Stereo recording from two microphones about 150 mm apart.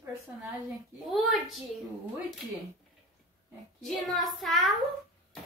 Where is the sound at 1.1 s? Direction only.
Centre (ahead or behind).